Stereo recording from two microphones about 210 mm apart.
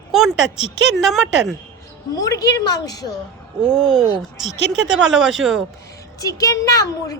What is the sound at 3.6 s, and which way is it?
Speech, 5° right (ahead or behind).